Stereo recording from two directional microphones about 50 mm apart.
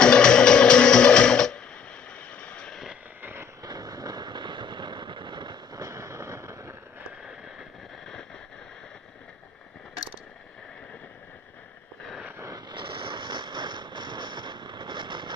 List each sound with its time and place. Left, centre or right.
0.0 s music: centre
3.2 s vehicle: right
5.9 s fireworks: right
7.2 s a sound: centre